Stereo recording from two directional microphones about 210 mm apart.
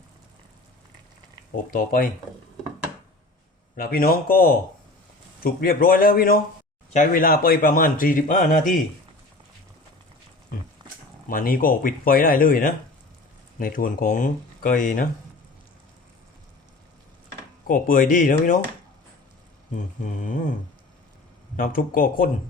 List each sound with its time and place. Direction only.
1.7 s speech: 40° left (ahead or behind)
3.8 s speech: 45° left (ahead or behind)
11.3 s speech: 40° left (ahead or behind)
17.7 s speech: 40° left (ahead or behind)
20.0 s speech: 35° left (ahead or behind)
21.5 s speech: 40° left (ahead or behind)